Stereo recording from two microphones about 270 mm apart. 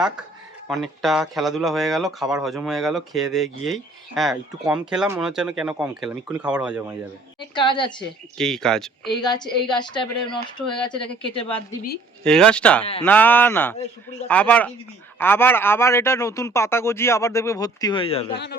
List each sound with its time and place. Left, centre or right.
0.7 s speech: centre
7.3 s a man's voice: centre
8.4 s speech: centre
9.1 s a man's voice: centre
12.2 s a man's voice: centre; by 18.3 s left